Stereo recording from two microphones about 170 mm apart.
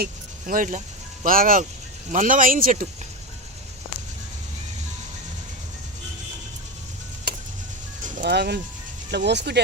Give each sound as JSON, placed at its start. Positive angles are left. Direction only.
{"t": 0.0, "sound": "speech", "side_deg": -55}
{"t": 8.2, "sound": "speech", "side_deg": -75}
{"t": 9.1, "sound": "speech", "side_deg": -90}